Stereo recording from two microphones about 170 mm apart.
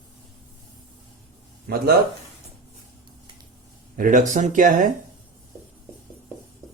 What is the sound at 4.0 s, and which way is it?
Speech, 50° right (ahead or behind).